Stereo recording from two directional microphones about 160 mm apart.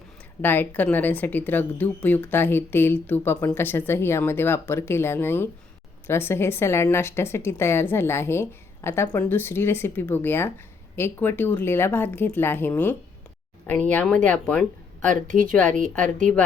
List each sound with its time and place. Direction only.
0.4 s speech: 10° left (ahead or behind)
15.3 s a woman's voice: 55° right (ahead or behind)
15.9 s speech: 10° left (ahead or behind)